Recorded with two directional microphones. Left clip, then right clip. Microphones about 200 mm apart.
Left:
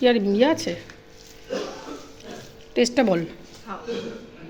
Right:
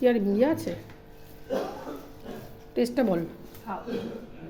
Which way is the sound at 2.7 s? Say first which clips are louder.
Left 6 dB; 15° left (ahead or behind).